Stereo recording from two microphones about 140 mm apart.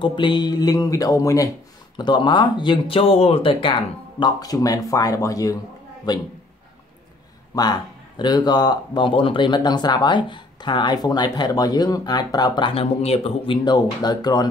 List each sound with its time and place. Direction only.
0.0 s speech: 35° left (ahead or behind)
4.4 s speech: 25° left (ahead or behind)
7.5 s speech: 30° left (ahead or behind)
14.0 s speech: 30° left (ahead or behind)